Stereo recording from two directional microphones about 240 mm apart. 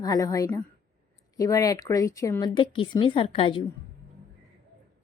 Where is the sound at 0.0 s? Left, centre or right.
Centre.